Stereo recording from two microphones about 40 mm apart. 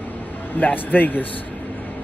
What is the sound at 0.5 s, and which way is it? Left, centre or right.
Speech, left.